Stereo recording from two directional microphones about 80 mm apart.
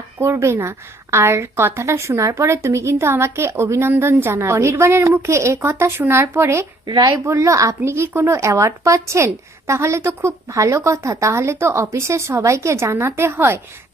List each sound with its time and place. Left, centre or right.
0.2 s speech: right
6.8 s speech: right
7.1 s speech: right